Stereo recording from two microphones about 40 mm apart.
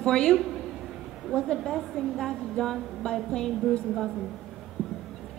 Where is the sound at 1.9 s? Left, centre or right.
Centre.